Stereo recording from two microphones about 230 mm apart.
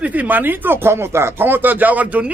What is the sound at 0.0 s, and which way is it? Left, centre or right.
Speech, centre.